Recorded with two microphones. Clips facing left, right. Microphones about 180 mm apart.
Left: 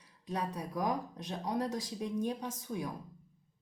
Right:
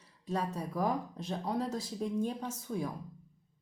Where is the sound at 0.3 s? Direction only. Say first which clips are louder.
Right 2 dB; 15° left (ahead or behind).